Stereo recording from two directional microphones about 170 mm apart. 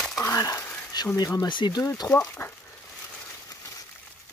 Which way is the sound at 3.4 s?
20° left (ahead or behind).